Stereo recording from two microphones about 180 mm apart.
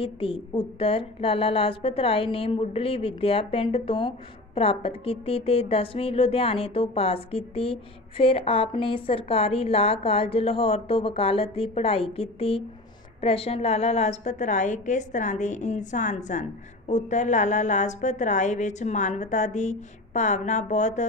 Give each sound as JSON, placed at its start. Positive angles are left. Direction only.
{"t": 0.0, "sound": "a woman's voice", "side_deg": 30}